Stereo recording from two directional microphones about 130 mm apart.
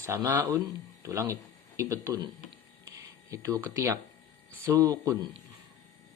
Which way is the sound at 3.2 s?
25° right (ahead or behind).